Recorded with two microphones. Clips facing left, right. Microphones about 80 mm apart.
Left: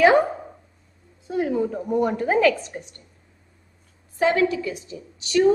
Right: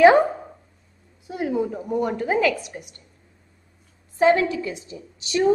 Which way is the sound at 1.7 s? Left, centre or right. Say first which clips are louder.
Left 2 dB; centre.